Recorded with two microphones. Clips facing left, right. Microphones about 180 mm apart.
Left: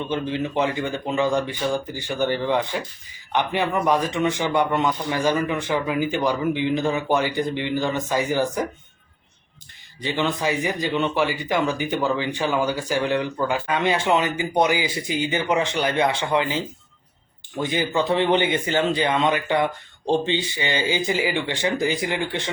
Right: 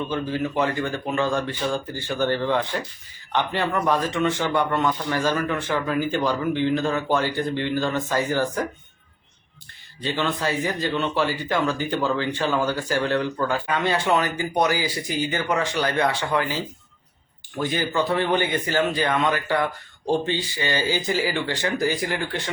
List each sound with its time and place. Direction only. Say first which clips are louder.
0.1 s speech: left 1 dB; 20° left (ahead or behind)
10.0 s speech: left 1 dB; 15° left (ahead or behind)